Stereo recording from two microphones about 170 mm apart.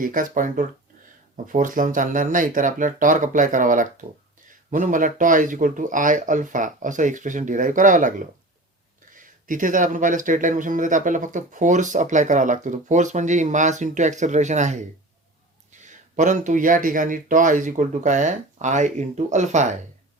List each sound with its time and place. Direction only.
0.0 s speech: 50° right (ahead or behind)